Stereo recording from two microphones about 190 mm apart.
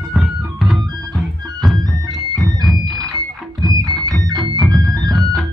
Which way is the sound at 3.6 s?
20° right (ahead or behind).